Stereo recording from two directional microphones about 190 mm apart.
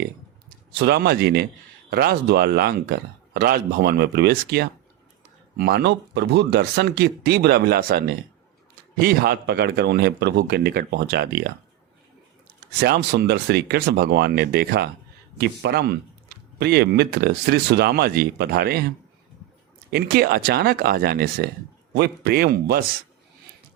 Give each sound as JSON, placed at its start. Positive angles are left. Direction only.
{"t": 0.7, "sound": "speech", "side_deg": -60}
{"t": 12.8, "sound": "speech", "side_deg": -60}
{"t": 19.9, "sound": "speech", "side_deg": -55}